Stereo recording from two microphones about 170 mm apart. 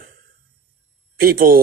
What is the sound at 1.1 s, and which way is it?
Speech, 60° right (ahead or behind).